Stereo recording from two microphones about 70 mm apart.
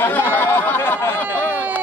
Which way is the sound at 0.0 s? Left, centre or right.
Left.